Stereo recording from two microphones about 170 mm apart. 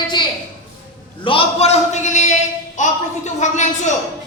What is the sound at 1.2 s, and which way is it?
A man's voice, 35° left (ahead or behind).